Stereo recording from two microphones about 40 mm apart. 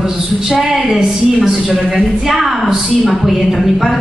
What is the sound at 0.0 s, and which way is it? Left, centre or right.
Speech, centre.